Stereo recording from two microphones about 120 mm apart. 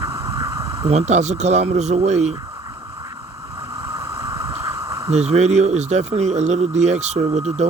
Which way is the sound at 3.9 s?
35° right (ahead or behind).